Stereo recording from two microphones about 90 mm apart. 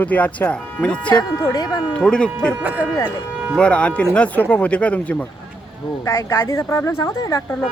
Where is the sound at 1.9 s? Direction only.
10° left (ahead or behind).